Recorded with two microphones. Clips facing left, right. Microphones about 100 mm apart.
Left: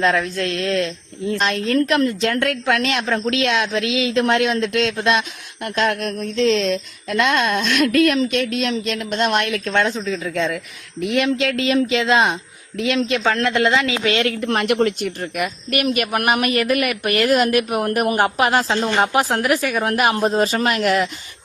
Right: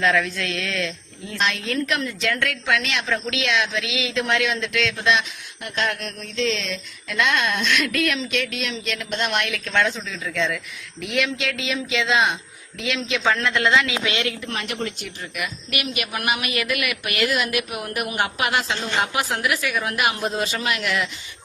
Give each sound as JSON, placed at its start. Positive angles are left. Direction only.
{"t": 0.0, "sound": "a woman's voice", "side_deg": 35}